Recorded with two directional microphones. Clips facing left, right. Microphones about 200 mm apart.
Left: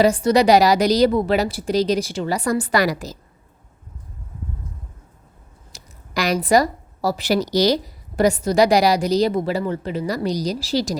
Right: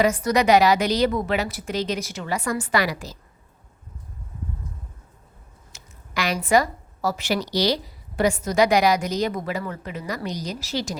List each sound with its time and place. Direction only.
0.0 s speech: 30° left (ahead or behind)
5.7 s speech: 40° left (ahead or behind)